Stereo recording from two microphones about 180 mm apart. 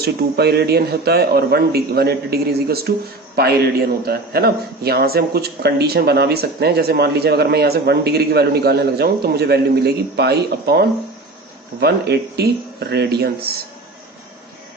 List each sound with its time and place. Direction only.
0.0 s a man's voice: 65° right (ahead or behind)